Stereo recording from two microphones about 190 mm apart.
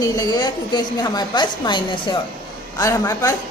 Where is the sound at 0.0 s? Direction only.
20° left (ahead or behind).